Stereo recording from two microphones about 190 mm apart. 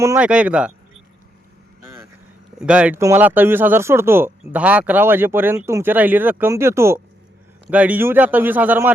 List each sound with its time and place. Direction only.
0.0 s speech: 15° right (ahead or behind)
2.6 s speech: 5° right (ahead or behind)